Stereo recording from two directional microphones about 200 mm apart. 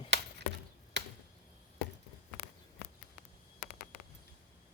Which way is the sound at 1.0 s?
60° right (ahead or behind).